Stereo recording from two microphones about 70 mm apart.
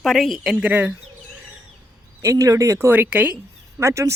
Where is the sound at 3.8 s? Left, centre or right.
Right.